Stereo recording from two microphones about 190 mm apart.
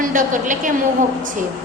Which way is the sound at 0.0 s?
45° right (ahead or behind).